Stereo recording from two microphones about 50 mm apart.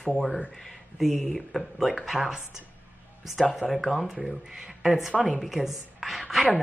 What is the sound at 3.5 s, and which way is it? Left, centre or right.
A woman's voice, centre.